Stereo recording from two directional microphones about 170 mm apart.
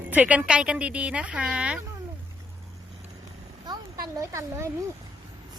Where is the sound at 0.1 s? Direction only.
10° right (ahead or behind).